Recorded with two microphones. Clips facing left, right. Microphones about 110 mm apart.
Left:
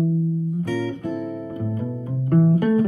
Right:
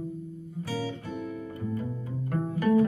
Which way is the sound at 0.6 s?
50° left (ahead or behind).